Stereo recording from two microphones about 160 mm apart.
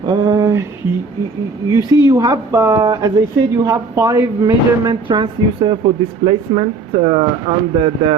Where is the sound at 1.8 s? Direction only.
25° right (ahead or behind).